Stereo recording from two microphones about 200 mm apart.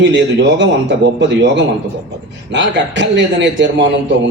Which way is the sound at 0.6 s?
65° right (ahead or behind).